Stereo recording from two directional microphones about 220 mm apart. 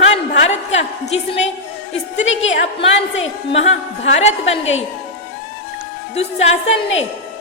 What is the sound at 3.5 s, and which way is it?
A woman's voice, 30° left (ahead or behind).